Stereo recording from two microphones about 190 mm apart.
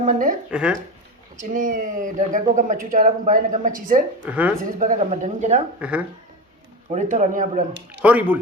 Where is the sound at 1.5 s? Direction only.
45° right (ahead or behind).